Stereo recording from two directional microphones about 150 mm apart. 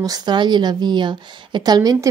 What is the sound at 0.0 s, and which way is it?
A woman's voice, 25° right (ahead or behind).